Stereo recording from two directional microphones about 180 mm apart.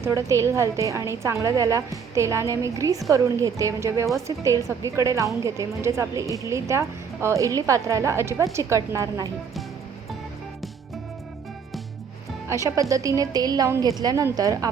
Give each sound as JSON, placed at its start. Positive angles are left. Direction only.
{"t": 0.0, "sound": "a woman's voice", "side_deg": -15}
{"t": 12.5, "sound": "a woman's voice", "side_deg": -15}